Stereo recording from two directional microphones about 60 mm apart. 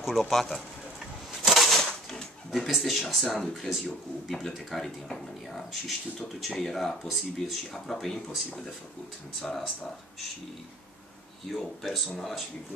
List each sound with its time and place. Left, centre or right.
0.0 s speech: centre
1.4 s a sound: centre
2.5 s speech: centre
7.9 s speech: centre
9.4 s speech: centre
11.4 s speech: centre